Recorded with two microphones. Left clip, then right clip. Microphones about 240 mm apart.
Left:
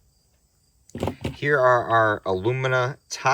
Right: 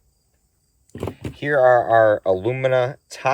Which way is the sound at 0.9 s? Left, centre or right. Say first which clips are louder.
Left 2 dB; centre.